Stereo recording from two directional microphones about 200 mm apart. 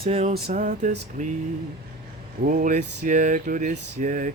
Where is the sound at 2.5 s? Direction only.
40° right (ahead or behind).